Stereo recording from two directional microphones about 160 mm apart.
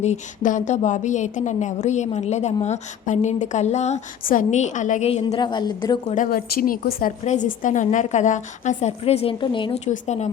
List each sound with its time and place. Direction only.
0.0 s a woman's voice: 50° left (ahead or behind)
5.4 s a woman's voice: 30° left (ahead or behind)
6.3 s a woman's voice: 65° left (ahead or behind); by 9.8 s 30° left (ahead or behind)
9.8 s a woman's voice: 45° left (ahead or behind)